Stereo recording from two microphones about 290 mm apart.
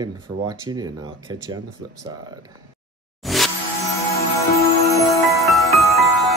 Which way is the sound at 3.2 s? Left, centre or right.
Centre.